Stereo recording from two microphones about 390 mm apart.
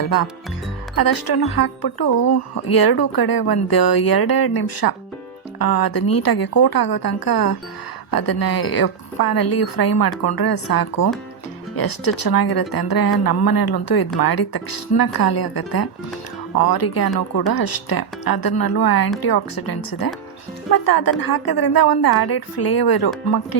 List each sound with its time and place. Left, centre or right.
0.0 s a woman's voice: left